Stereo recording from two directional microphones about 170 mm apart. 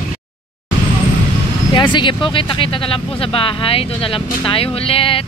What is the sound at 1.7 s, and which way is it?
Speech, 25° left (ahead or behind).